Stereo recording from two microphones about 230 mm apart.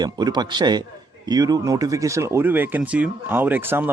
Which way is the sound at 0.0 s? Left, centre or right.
Centre.